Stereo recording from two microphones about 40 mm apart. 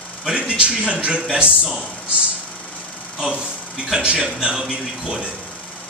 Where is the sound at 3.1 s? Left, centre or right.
Right.